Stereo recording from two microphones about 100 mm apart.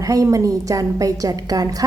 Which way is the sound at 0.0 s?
35° right (ahead or behind).